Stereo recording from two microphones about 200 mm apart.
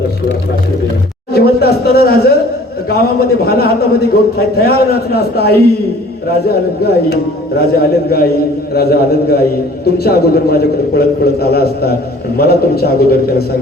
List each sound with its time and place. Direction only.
1.3 s a man's voice: 50° left (ahead or behind)